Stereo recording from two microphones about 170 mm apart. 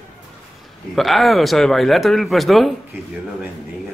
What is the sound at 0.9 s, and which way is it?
Speech, centre (ahead or behind).